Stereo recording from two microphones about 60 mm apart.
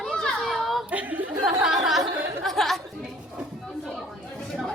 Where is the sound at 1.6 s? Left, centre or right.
Centre.